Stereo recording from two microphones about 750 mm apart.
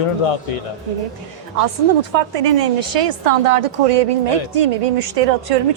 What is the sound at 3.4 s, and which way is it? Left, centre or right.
Speech, right.